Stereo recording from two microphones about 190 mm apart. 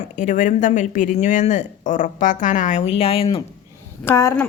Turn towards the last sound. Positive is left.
turn(degrees=15)  # may be behind; listen again after turning